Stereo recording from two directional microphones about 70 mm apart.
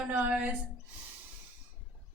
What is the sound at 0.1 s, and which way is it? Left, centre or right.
Speech, centre.